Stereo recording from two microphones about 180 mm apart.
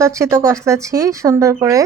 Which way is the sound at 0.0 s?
15° right (ahead or behind).